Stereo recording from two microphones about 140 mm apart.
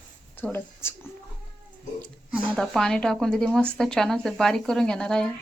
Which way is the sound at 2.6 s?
5° left (ahead or behind).